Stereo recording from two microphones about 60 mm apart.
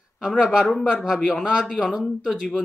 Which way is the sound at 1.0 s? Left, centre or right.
Centre.